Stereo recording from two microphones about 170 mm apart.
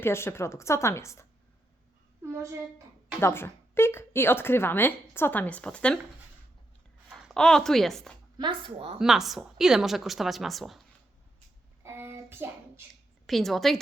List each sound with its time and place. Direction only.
0.0 s speech: 15° left (ahead or behind)
2.2 s a sound: 15° right (ahead or behind)
3.2 s speech: 15° left (ahead or behind)
7.1 s speech: 5° right (ahead or behind)
8.4 s speech: 30° right (ahead or behind)
9.0 s a woman's voice: centre (ahead or behind)
11.8 s a sound: 15° right (ahead or behind)
13.2 s a woman's voice: centre (ahead or behind)